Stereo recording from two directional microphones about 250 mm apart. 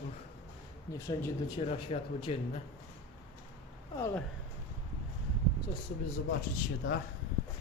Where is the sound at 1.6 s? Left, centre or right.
Left.